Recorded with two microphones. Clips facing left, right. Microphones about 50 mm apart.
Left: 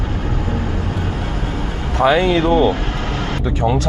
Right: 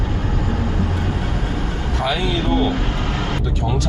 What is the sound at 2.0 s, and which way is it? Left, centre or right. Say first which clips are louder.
Speech: left 8 dB; left.